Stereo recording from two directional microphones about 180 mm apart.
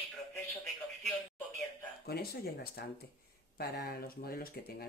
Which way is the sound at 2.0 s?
60° left (ahead or behind).